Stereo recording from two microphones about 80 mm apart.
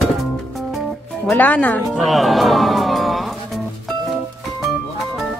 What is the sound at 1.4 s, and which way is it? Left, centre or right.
Speech, centre.